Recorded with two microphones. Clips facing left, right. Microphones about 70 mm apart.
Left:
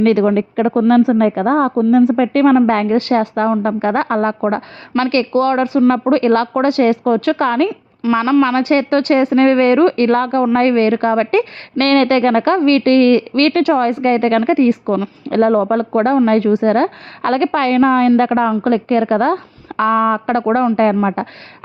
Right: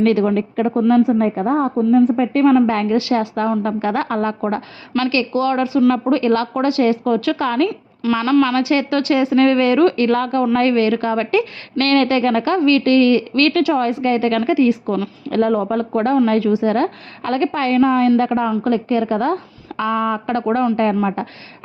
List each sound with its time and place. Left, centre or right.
0.0 s a woman's voice: left
0.8 s a woman's voice: left
2.6 s a woman's voice: left
7.7 s speech: left
8.6 s a woman's voice: left